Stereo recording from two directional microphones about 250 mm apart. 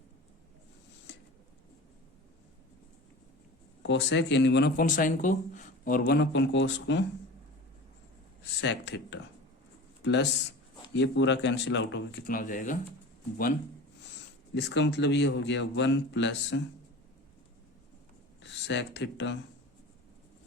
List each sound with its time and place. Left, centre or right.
3.8 s speech: left
8.6 s speech: left
14.5 s speech: left
18.4 s speech: left